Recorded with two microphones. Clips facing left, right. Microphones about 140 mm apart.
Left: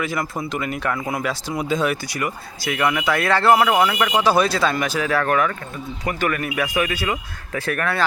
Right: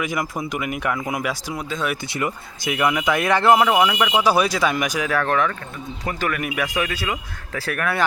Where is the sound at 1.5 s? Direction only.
10° left (ahead or behind).